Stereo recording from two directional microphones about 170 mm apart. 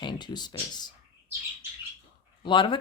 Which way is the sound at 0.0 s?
25° left (ahead or behind).